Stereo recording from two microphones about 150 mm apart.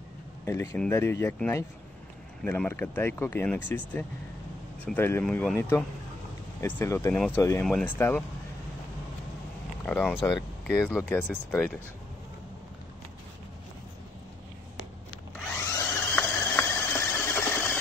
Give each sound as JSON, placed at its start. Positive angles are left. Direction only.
{"t": 0.5, "sound": "speech", "side_deg": 20}
{"t": 4.8, "sound": "speech", "side_deg": 15}
{"t": 7.6, "sound": "speech", "side_deg": 5}
{"t": 9.8, "sound": "speech", "side_deg": 5}
{"t": 10.2, "sound": "speech", "side_deg": 20}
{"t": 15.7, "sound": "a sound", "side_deg": 20}